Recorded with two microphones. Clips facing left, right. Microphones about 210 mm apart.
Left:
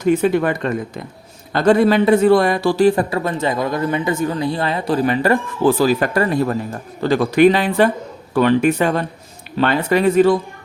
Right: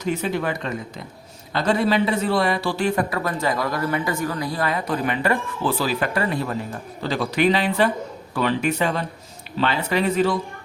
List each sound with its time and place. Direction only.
0.0 s a man's voice: 55° left (ahead or behind)